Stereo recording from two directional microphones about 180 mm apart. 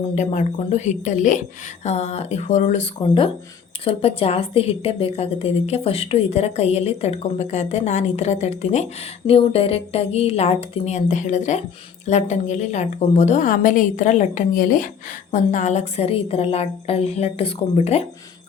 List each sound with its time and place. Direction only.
0.2 s a woman's voice: 40° left (ahead or behind)